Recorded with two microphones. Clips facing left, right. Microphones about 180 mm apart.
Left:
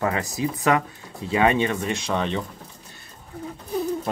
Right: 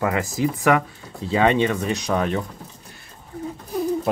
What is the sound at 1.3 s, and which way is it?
Speech, 25° right (ahead or behind).